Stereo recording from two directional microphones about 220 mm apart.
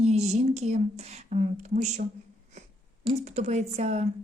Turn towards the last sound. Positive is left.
turn(degrees=-30)  # may be behind; listen again after turning